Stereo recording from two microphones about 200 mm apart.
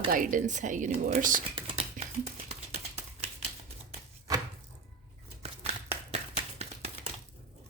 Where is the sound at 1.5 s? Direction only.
30° right (ahead or behind).